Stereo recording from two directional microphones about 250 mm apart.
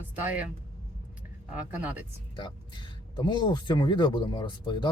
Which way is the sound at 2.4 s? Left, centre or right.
Centre.